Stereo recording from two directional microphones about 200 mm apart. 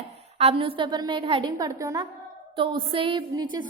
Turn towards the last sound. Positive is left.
turn(degrees=-20)  # may be behind; listen again after turning